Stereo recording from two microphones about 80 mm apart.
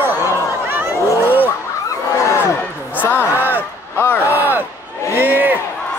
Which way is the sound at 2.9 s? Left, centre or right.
Left.